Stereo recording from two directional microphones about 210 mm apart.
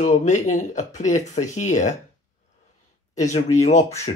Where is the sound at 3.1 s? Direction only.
35° left (ahead or behind).